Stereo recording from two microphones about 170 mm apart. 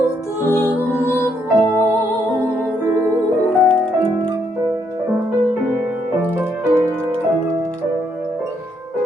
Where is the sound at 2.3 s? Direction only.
5° right (ahead or behind).